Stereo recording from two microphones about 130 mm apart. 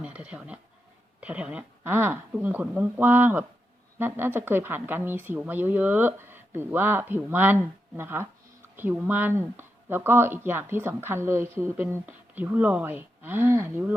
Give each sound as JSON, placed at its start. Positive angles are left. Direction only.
{"t": 0.0, "sound": "speech", "side_deg": -10}